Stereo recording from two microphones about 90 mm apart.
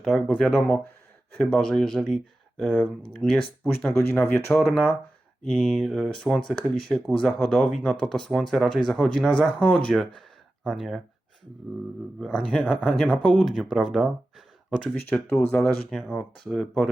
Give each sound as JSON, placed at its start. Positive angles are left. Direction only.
{"t": 0.0, "sound": "speech", "side_deg": 5}
{"t": 3.8, "sound": "speech", "side_deg": 20}
{"t": 10.2, "sound": "a sound", "side_deg": 5}
{"t": 12.2, "sound": "speech", "side_deg": 10}